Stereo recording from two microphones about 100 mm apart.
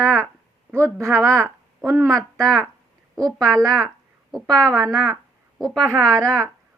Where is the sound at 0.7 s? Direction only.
25° right (ahead or behind).